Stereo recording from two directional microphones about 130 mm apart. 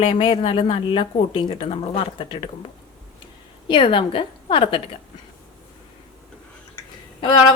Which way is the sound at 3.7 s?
40° left (ahead or behind).